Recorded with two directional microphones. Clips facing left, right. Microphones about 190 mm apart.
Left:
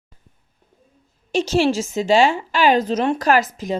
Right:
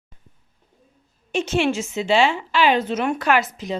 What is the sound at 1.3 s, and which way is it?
A woman's voice, 35° left (ahead or behind).